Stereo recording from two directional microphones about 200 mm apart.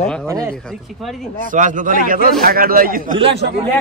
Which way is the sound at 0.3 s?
15° right (ahead or behind).